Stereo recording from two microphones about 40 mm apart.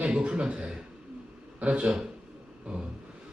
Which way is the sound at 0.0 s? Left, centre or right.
Right.